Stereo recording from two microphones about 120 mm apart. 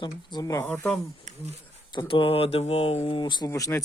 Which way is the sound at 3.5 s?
25° left (ahead or behind).